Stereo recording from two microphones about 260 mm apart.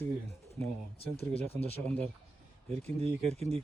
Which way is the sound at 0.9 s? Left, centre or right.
Left.